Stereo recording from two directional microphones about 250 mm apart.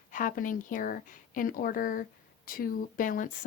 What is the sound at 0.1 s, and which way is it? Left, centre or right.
Speech, left.